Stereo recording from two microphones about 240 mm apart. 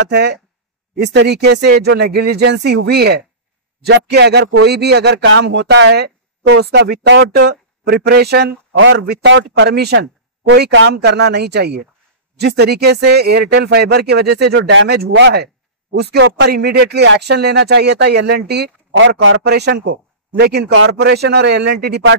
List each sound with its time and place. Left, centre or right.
0.1 s a man's voice: right